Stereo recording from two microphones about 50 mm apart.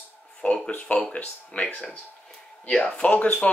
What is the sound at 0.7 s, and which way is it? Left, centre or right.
Speech, left.